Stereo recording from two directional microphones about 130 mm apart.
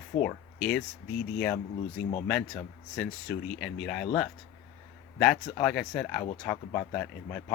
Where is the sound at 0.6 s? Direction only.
5° left (ahead or behind).